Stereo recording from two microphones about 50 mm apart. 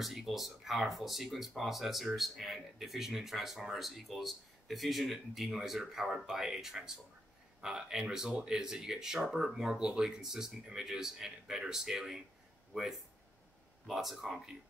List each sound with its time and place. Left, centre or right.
0.0 s speech: centre; by 8.5 s right
8.5 s speech: centre
13.8 s speech: centre